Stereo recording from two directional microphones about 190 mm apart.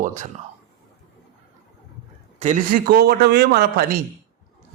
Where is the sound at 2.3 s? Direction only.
40° right (ahead or behind).